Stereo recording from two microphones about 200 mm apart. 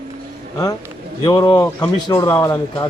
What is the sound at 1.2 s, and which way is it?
Speech, 20° left (ahead or behind).